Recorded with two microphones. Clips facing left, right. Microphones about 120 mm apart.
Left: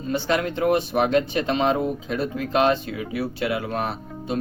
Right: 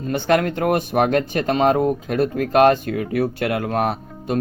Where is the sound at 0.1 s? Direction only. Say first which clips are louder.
Right 5 dB; 55° right (ahead or behind).